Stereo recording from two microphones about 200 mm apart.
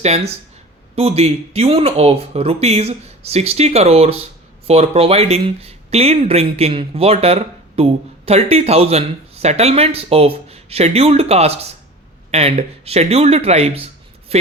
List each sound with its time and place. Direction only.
0.9 s speech: 30° right (ahead or behind)